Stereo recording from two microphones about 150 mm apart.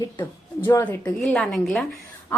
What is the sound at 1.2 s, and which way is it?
Speech, centre (ahead or behind).